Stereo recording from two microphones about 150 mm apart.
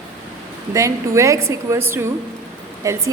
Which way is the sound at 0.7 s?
20° right (ahead or behind).